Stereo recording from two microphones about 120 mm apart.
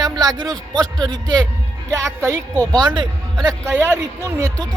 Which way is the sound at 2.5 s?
15° left (ahead or behind).